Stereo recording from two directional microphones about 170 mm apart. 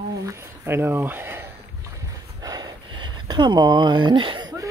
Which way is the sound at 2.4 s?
20° right (ahead or behind).